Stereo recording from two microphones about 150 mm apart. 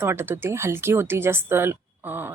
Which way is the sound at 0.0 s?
15° right (ahead or behind).